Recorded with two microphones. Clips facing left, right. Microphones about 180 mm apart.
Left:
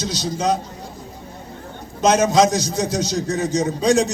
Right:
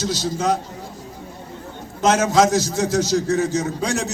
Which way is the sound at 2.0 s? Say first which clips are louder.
Left 1 dB; 20° left (ahead or behind).